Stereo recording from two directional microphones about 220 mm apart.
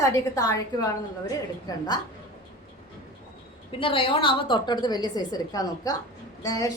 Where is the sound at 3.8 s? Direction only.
25° left (ahead or behind).